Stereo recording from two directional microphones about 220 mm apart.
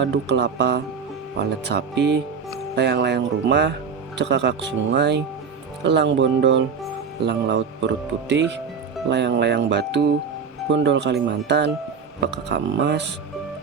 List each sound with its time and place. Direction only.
0.0 s speech: 50° right (ahead or behind)